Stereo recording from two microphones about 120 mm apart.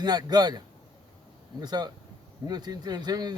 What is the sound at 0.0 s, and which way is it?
Speech, 35° right (ahead or behind).